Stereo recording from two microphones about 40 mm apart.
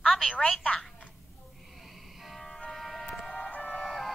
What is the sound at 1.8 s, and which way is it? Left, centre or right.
Music, centre.